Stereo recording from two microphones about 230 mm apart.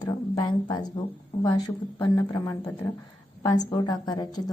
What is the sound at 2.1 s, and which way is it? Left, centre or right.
A woman's voice, centre.